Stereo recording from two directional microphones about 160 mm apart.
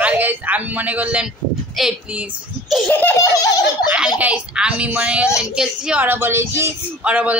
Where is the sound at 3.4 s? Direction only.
25° left (ahead or behind).